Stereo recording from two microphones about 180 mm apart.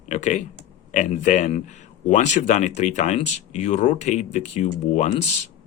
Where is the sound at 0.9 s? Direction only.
40° left (ahead or behind).